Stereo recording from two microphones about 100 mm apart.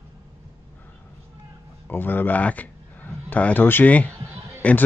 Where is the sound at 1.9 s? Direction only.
20° left (ahead or behind).